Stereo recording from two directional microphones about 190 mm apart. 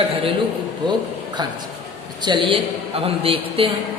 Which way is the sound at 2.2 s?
25° right (ahead or behind).